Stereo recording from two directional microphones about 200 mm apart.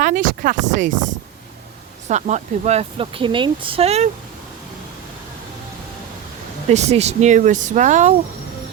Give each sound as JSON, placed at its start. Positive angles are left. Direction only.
{"t": 0.0, "sound": "speech", "side_deg": -40}
{"t": 2.0, "sound": "speech", "side_deg": -35}
{"t": 6.7, "sound": "speech", "side_deg": -35}